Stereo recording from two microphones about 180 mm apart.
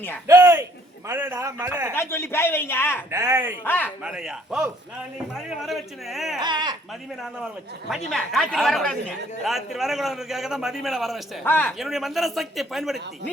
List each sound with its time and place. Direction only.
0.3 s a man's voice: 15° right (ahead or behind)
1.9 s speech: 15° left (ahead or behind)
3.1 s a man's voice: 15° right (ahead or behind)
3.6 s speech: 10° left (ahead or behind)
4.0 s speech: 5° right (ahead or behind)
6.4 s speech: 25° right (ahead or behind)
7.9 s speech: centre (ahead or behind)
11.4 s speech: 10° left (ahead or behind)
11.8 s speech: centre (ahead or behind)